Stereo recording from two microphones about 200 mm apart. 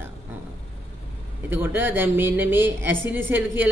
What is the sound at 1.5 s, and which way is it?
A man's voice, 10° right (ahead or behind).